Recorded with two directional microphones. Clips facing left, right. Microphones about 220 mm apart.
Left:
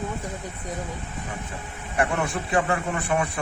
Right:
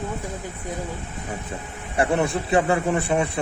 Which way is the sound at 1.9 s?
30° right (ahead or behind).